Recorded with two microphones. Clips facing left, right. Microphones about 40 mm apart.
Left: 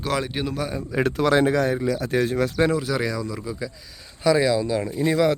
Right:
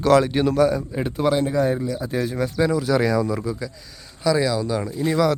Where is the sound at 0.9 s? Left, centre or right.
Left.